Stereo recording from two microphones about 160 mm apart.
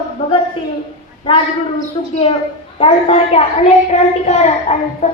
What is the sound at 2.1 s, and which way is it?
A woman's voice, 35° left (ahead or behind).